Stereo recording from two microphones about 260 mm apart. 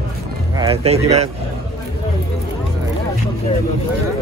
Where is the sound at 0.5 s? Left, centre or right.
Right.